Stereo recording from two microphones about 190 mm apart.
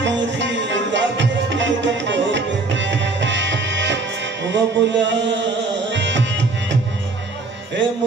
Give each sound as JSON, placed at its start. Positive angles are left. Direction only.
{"t": 0.0, "sound": "music", "side_deg": -70}